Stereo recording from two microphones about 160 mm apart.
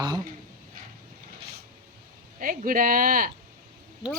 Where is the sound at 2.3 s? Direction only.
60° right (ahead or behind).